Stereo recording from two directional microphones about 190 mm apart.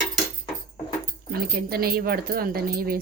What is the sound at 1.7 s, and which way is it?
Speech, 55° right (ahead or behind).